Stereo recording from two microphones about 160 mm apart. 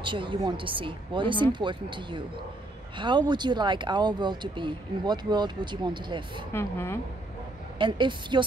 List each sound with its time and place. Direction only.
0.0 s speech: 30° right (ahead or behind)
6.5 s a woman's voice: 15° left (ahead or behind)
7.8 s speech: 30° right (ahead or behind)